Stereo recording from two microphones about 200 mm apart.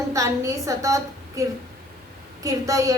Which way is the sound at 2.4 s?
15° right (ahead or behind).